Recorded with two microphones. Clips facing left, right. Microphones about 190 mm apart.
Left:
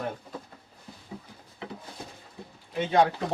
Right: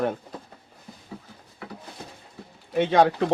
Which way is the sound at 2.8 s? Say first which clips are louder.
Right 4 dB; 80° right.